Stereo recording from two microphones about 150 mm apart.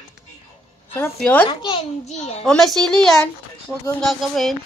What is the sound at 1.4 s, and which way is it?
Speech, 30° left (ahead or behind).